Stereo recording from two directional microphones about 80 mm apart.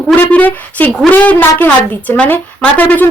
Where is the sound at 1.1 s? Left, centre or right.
Left.